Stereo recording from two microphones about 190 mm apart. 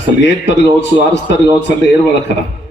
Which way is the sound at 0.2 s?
70° left (ahead or behind).